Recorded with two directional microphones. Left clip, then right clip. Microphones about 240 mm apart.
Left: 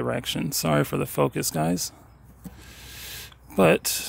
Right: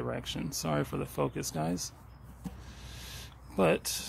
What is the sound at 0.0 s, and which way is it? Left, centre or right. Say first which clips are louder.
Speech: left 9 dB; left.